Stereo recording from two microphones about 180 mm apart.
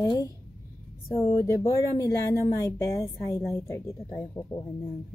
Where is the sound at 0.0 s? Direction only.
20° left (ahead or behind).